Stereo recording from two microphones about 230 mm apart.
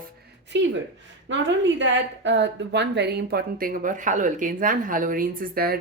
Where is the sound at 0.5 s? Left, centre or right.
Right.